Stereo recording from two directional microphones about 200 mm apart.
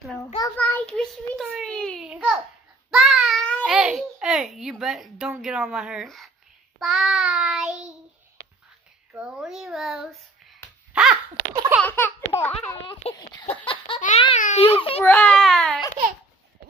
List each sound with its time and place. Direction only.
0.6 s child singing: 10° left (ahead or behind)
3.7 s a child's voice: 5° right (ahead or behind)
9.1 s a child's voice: 5° right (ahead or behind)
10.9 s a sound: centre (ahead or behind)
11.5 s laughter: 20° right (ahead or behind)
11.8 s laughter: 10° left (ahead or behind)
13.0 s a sound: 30° left (ahead or behind)
14.0 s a child's voice: 30° left (ahead or behind)
15.0 s a child's voice: 5° left (ahead or behind)